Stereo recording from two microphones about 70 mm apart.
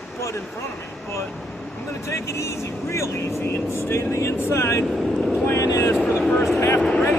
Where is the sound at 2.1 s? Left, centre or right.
Left.